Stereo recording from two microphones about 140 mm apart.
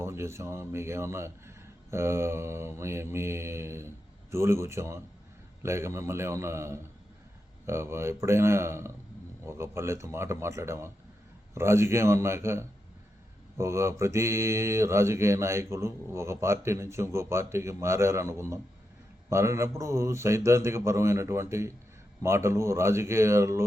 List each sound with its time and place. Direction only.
0.0 s mantra: 20° right (ahead or behind)